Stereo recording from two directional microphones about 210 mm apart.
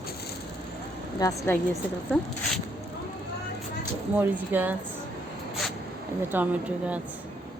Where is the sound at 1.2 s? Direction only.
15° left (ahead or behind).